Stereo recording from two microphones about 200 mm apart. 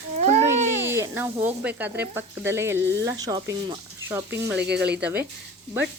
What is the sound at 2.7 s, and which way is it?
Speech, 65° right (ahead or behind).